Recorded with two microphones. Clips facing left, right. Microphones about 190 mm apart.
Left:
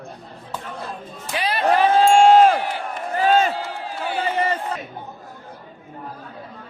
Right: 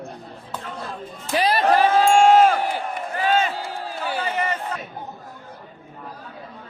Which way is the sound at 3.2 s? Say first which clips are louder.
Left 4 dB; 40° left (ahead or behind).